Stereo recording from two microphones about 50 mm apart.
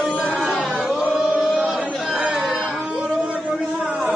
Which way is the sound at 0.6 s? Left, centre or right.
Centre.